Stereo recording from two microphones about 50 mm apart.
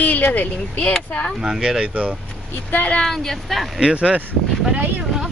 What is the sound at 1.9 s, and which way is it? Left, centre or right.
Speech, right.